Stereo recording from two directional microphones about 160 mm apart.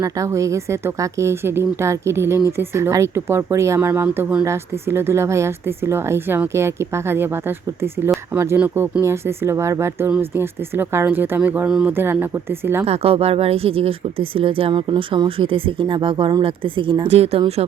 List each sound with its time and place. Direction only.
0.0 s a woman's voice: 20° right (ahead or behind)
12.8 s speech: 40° right (ahead or behind)